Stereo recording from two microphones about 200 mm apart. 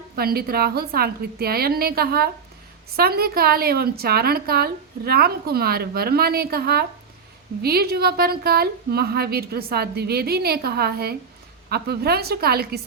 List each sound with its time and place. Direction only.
0.2 s a woman's voice: 50° right (ahead or behind)